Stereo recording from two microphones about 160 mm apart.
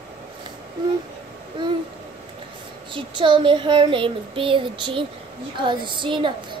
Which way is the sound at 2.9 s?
30° right (ahead or behind).